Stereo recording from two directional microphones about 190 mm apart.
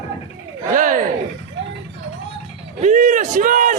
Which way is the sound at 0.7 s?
45° right (ahead or behind).